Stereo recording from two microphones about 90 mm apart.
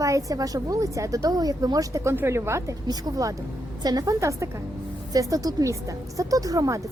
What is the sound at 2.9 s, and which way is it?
A woman's voice, 45° right (ahead or behind).